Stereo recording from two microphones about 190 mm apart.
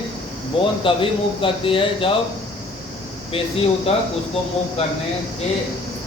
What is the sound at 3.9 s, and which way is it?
A man's voice, 30° left (ahead or behind).